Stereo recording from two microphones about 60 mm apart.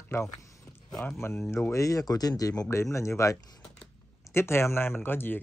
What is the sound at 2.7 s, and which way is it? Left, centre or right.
Speech, left.